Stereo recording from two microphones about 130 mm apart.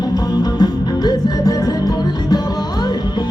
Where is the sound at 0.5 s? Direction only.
30° left (ahead or behind).